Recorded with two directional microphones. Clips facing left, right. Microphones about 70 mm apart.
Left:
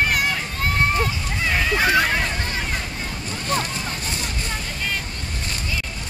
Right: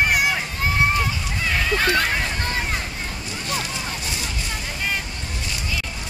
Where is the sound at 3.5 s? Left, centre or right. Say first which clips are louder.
Left 5 dB; left.